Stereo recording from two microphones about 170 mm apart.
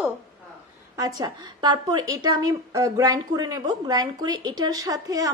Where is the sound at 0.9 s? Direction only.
20° right (ahead or behind).